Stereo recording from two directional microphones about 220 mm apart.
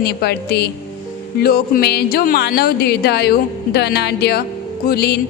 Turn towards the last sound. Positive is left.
turn(degrees=45)  # may be behind; listen again after turning